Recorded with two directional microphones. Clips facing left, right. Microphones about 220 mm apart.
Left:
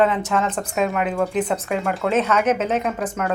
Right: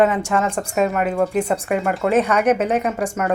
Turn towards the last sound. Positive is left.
turn(degrees=-10)  # may be behind; listen again after turning